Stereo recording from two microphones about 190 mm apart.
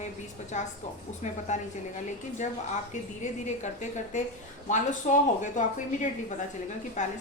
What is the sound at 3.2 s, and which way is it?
A woman's voice, 40° left (ahead or behind).